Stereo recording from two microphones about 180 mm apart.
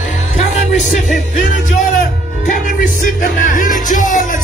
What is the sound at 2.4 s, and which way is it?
Music, 45° left (ahead or behind).